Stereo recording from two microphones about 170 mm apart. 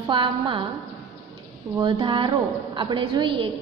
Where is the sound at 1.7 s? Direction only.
25° right (ahead or behind).